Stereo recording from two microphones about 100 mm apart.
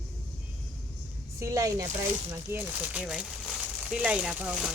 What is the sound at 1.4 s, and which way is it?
Speech, 35° right (ahead or behind).